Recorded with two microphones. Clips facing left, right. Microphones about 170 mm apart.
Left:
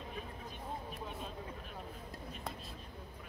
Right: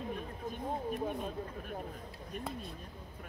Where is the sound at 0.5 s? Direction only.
50° right (ahead or behind).